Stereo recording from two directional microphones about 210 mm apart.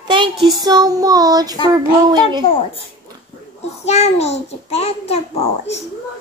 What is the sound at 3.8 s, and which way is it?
A child's voice, 30° left (ahead or behind).